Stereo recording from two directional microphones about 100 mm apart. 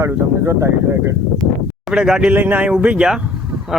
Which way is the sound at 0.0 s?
30° right (ahead or behind).